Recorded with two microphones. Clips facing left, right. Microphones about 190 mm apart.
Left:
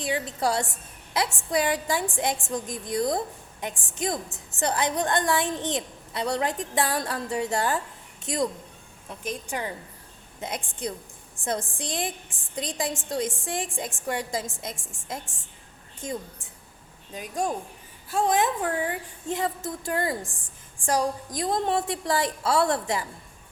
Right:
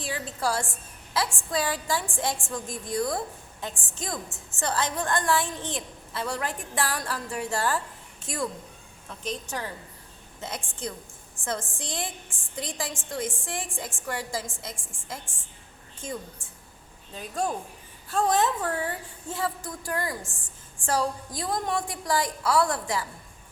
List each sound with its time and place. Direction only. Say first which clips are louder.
0.0 s a woman's voice: left 3 dB; 20° left (ahead or behind)
17.2 s a woman's voice: left 1 dB; 15° left (ahead or behind)